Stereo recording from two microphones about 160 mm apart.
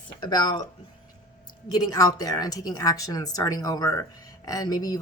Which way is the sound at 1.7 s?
25° left (ahead or behind).